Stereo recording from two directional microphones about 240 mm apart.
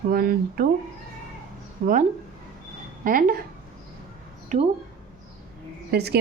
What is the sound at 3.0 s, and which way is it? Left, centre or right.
Speech, right.